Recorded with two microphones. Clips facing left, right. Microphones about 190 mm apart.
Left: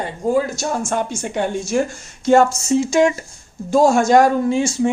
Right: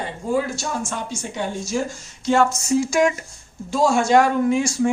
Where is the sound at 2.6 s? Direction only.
25° left (ahead or behind).